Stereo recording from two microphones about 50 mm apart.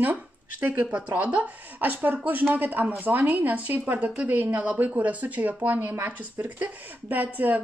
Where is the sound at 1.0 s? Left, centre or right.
Right.